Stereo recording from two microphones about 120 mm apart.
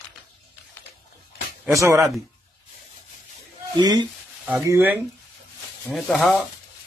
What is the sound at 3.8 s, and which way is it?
Speech, 35° right (ahead or behind).